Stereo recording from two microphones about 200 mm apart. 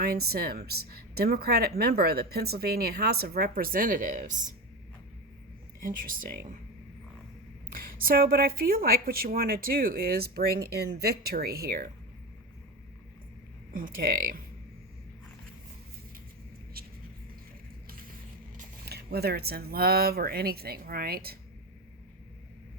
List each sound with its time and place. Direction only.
0.0 s speech: 50° right (ahead or behind)
5.8 s speech: 45° right (ahead or behind)
7.7 s speech: 45° right (ahead or behind)
13.7 s speech: 45° right (ahead or behind)
16.8 s vehicle: 50° right (ahead or behind)
17.8 s a sound: 45° right (ahead or behind)
18.5 s speech: 45° right (ahead or behind)